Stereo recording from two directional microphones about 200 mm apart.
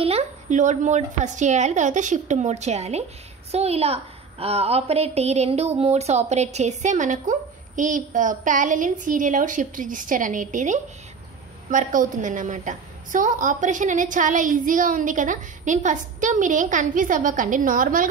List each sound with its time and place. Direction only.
0.0 s a woman's voice: 30° right (ahead or behind)